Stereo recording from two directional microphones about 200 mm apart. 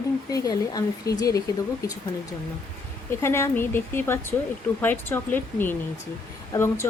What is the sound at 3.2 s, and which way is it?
Speech, 15° left (ahead or behind).